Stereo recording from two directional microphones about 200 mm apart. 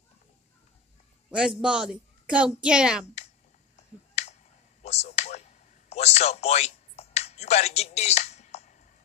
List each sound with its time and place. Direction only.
1.3 s a woman's voice: 5° right (ahead or behind)
3.7 s finger snapping: 35° left (ahead or behind)
4.8 s a sound: 35° left (ahead or behind)